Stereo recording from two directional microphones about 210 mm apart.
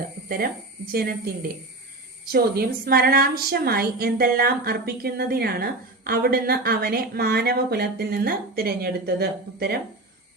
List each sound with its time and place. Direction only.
0.3 s speech: 45° right (ahead or behind)